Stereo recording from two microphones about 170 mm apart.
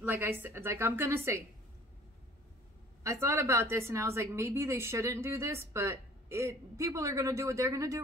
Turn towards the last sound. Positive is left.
turn(degrees=-20)  # may be behind; listen again after turning